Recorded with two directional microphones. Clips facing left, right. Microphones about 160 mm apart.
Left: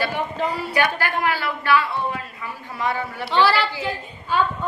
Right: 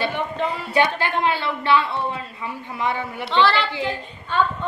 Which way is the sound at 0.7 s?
25° right (ahead or behind).